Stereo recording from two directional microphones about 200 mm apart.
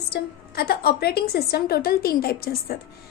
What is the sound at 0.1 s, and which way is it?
A woman's voice, 50° left (ahead or behind).